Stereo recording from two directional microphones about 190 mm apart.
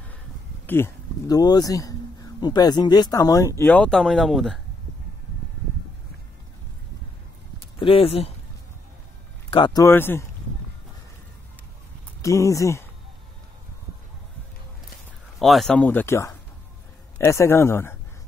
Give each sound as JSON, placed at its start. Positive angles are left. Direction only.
{"t": 0.7, "sound": "speech", "side_deg": 15}
{"t": 7.8, "sound": "speech", "side_deg": 30}
{"t": 9.5, "sound": "speech", "side_deg": 25}
{"t": 12.2, "sound": "speech", "side_deg": 15}
{"t": 15.3, "sound": "speech", "side_deg": 0}